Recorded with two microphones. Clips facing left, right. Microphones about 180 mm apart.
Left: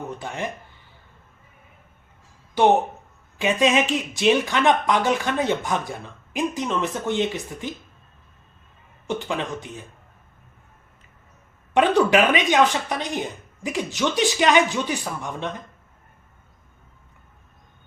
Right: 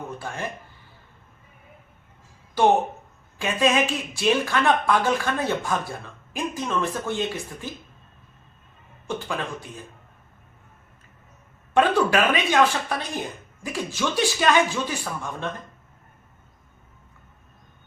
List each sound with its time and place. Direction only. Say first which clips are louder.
0.2 s speech: left 2 dB; 20° left (ahead or behind)
3.3 s speech: left 2 dB; 20° left (ahead or behind)
9.0 s speech: left 3 dB; 20° left (ahead or behind)
11.7 s speech: left 2 dB; 20° left (ahead or behind)